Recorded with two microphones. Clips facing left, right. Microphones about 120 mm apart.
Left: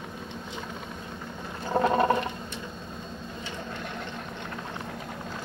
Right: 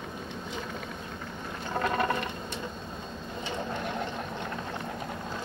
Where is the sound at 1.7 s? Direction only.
25° left (ahead or behind).